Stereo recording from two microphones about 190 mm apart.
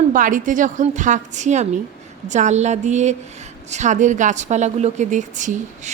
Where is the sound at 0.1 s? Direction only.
45° right (ahead or behind).